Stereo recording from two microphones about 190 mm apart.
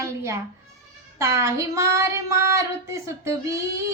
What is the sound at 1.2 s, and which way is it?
Child singing, 15° right (ahead or behind).